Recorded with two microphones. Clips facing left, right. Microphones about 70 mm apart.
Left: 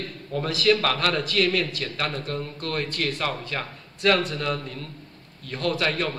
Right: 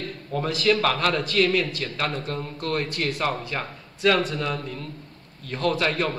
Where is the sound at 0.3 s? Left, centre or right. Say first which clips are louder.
Even; centre.